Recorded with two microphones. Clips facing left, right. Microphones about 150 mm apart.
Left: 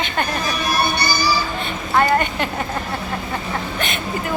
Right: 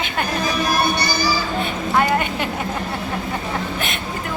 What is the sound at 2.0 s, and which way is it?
Speech, 5° right (ahead or behind).